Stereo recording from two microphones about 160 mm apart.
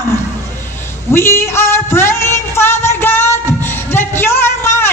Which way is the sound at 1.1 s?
15° left (ahead or behind).